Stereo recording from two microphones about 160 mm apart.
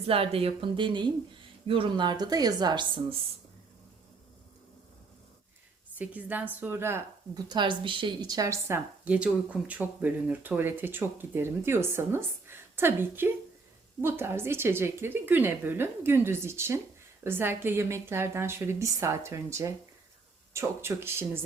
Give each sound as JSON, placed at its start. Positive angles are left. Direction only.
{"t": 0.1, "sound": "speech", "side_deg": -35}
{"t": 5.9, "sound": "speech", "side_deg": -10}
{"t": 7.4, "sound": "speech", "side_deg": -30}